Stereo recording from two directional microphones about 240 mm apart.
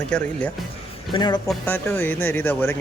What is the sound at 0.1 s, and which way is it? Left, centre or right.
Speech, centre.